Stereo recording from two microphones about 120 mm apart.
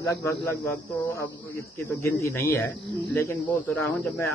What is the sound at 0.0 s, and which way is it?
Speech, 20° left (ahead or behind).